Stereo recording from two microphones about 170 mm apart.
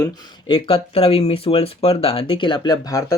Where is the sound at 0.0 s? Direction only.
25° left (ahead or behind).